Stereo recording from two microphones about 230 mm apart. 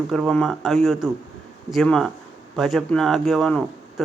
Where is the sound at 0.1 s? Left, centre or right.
Centre.